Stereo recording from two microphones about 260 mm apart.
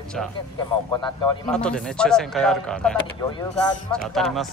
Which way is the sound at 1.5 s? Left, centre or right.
Centre.